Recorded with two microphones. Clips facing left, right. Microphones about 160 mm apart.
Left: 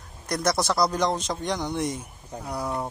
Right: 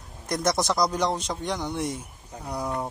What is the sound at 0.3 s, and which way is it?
A man's voice, 20° right (ahead or behind).